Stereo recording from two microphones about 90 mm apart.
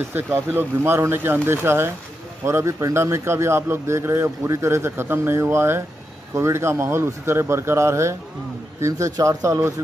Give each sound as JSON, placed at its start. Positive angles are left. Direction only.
{"t": 0.1, "sound": "speech", "side_deg": -25}